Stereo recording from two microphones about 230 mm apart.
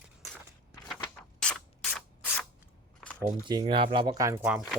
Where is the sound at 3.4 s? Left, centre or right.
Centre.